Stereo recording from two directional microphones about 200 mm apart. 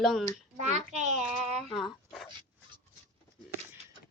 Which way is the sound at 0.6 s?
35° right (ahead or behind).